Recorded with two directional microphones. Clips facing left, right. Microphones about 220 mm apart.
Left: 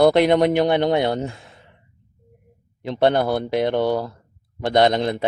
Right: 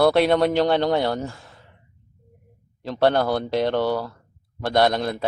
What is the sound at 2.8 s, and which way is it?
Speech, 20° left (ahead or behind).